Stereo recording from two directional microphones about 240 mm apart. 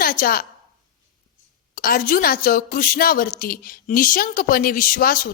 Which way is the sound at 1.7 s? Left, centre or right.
Left.